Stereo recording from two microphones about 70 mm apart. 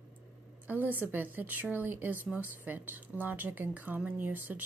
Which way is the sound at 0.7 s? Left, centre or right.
Right.